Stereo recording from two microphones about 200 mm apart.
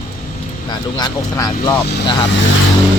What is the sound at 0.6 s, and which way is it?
Speech, 20° left (ahead or behind).